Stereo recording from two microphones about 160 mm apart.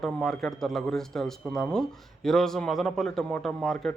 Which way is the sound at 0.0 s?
Centre (ahead or behind).